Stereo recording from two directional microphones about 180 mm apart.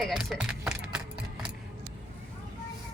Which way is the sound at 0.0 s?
Centre (ahead or behind).